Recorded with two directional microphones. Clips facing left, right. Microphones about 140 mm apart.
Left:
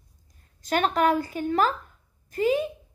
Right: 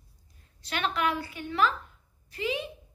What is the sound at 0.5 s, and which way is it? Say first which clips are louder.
A child's voice: left 7 dB; 45° left (ahead or behind).